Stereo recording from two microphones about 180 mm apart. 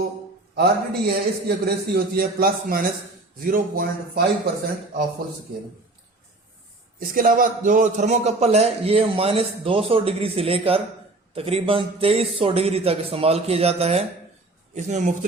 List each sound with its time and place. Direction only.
0.5 s a man's voice: 60° right (ahead or behind)
7.0 s a man's voice: 50° right (ahead or behind)